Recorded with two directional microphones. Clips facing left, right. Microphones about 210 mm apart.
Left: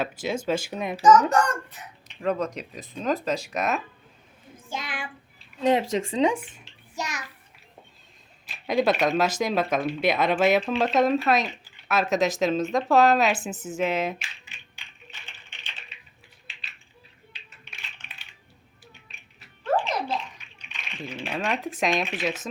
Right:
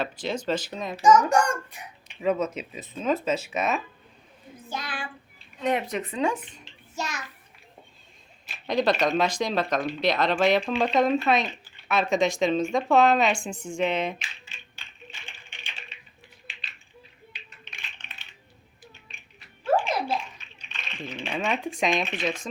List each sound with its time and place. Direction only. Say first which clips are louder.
0.0 s speech: left 1 dB; 10° left (ahead or behind)
1.3 s a child's voice: even; 10° right (ahead or behind)
4.8 s child singing: left 1 dB; 20° left (ahead or behind)
5.5 s speech: left 4 dB; 25° left (ahead or behind)
6.3 s a sound: left 3 dB; 10° left (ahead or behind)
8.4 s speech: left 1 dB; 10° left (ahead or behind)
14.4 s music: right 2 dB; 15° left (ahead or behind)
15.3 s typing: right 2 dB; 15° right (ahead or behind)
17.3 s music: right 3 dB; 15° right (ahead or behind)
17.7 s music: left 1 dB; 10° left (ahead or behind)
19.6 s bathtub: right 1 dB; 10° right (ahead or behind)
20.4 s speech: right 1 dB; 10° left (ahead or behind)